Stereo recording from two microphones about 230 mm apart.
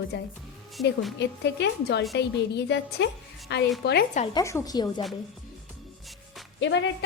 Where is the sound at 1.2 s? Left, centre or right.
Left.